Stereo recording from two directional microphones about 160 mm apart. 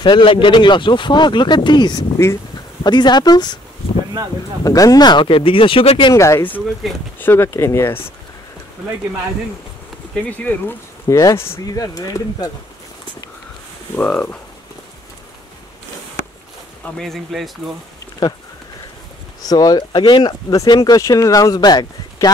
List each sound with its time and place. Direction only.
0.0 s speech: 30° left (ahead or behind)
4.6 s speech: 20° left (ahead or behind)
6.1 s speech: 20° left (ahead or behind)
6.8 s speech: centre (ahead or behind)
7.2 s speech: 15° left (ahead or behind)
10.3 s speech: 10° left (ahead or behind)
13.9 s speech: 10° left (ahead or behind)
16.8 s speech: centre (ahead or behind)
19.4 s speech: 25° left (ahead or behind)